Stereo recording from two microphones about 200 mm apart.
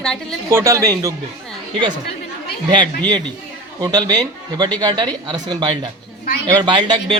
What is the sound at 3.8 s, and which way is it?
Speech, 20° right (ahead or behind).